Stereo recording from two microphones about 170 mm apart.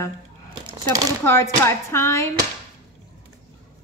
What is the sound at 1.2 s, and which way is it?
A woman's voice, 15° left (ahead or behind).